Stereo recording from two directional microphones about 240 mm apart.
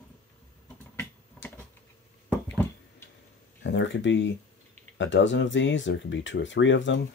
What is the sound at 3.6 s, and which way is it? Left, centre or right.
Speech, left.